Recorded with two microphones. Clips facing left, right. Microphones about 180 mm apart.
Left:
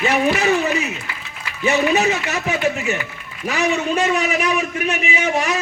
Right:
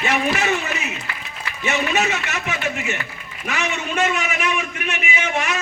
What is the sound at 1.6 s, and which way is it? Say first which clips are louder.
A man's voice: left 5 dB; 35° left (ahead or behind).